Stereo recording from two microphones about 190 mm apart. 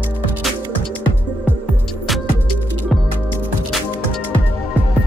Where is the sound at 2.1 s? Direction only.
Centre (ahead or behind).